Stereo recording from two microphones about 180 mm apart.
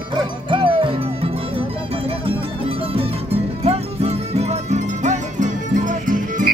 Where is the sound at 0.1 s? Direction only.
30° right (ahead or behind).